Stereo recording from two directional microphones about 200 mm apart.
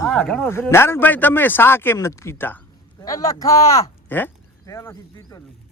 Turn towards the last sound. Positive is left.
turn(degrees=15)  # may be behind; listen again after turning